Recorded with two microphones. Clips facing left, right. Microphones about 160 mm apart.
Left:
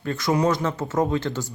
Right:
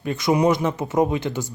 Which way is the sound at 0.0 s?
15° right (ahead or behind).